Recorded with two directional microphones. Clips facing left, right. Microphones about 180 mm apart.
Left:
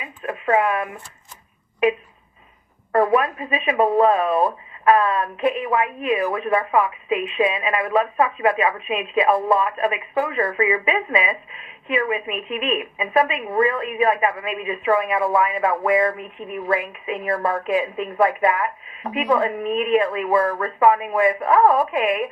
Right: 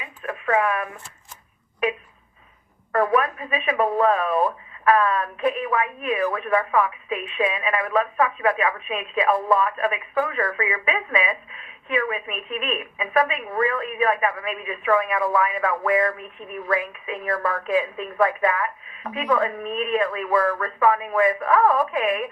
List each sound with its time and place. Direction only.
0.2 s speech: 20° left (ahead or behind)
2.9 s speech: 25° left (ahead or behind)